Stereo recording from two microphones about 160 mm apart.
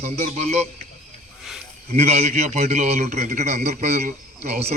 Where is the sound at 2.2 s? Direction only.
45° right (ahead or behind).